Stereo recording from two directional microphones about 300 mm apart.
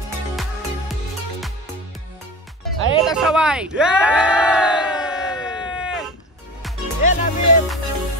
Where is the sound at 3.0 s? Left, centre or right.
Centre.